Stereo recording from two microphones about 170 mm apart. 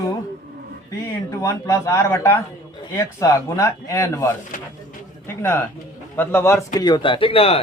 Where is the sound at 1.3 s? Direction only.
20° left (ahead or behind).